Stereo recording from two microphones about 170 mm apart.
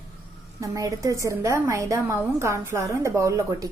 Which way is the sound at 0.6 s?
20° right (ahead or behind).